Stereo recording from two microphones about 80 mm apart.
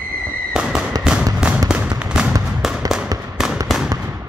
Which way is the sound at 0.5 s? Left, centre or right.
Centre.